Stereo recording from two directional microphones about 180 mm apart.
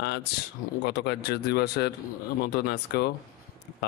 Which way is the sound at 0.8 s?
65° left (ahead or behind).